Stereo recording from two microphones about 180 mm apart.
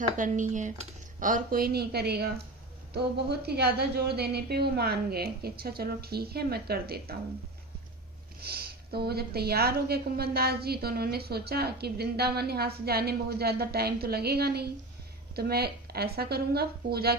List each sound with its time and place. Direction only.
0.2 s a woman's voice: 45° right (ahead or behind); by 7.2 s 60° right (ahead or behind)
8.4 s a woman's voice: 60° right (ahead or behind)